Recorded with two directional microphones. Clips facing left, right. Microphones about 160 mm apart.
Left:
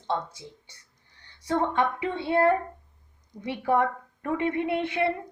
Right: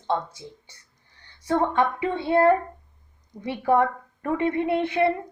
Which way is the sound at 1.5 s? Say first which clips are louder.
Right 3 dB; 50° right (ahead or behind).